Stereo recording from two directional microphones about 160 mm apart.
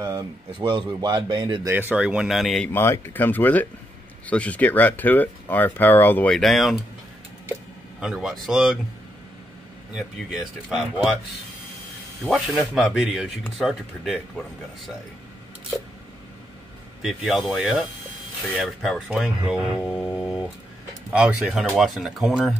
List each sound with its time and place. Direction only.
0.0 s speech: 30° right (ahead or behind)
1.7 s speech: 10° right (ahead or behind)
2.7 s speech: 15° left (ahead or behind)
8.0 s speech: 5° right (ahead or behind)
9.9 s speech: 5° right (ahead or behind)
12.3 s speech: centre (ahead or behind)
17.0 s speech: centre (ahead or behind)